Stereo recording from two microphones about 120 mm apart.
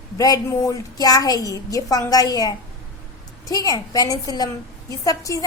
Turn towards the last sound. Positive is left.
turn(degrees=30)  # may be behind; listen again after turning